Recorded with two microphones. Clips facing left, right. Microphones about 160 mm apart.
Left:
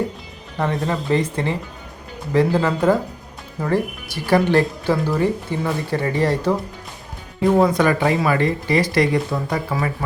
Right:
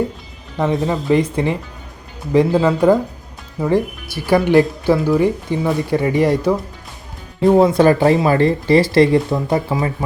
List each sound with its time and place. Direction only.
0.6 s speech: 15° right (ahead or behind)
7.4 s speech: 30° right (ahead or behind)